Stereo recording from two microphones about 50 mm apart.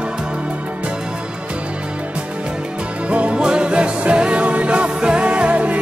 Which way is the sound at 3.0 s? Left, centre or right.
Right.